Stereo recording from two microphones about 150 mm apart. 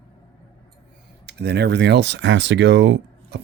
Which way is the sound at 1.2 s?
90° right.